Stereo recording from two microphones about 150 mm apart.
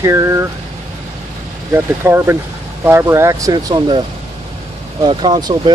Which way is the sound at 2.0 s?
15° right (ahead or behind).